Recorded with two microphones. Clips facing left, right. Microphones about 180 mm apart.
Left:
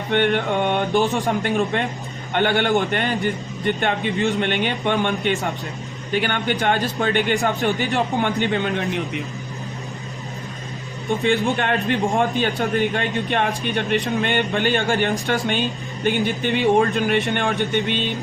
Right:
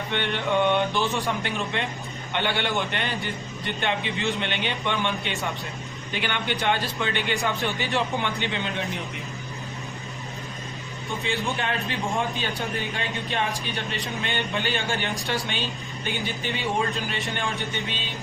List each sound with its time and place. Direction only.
0.1 s a man's voice: 50° left (ahead or behind)
11.4 s a man's voice: 60° left (ahead or behind)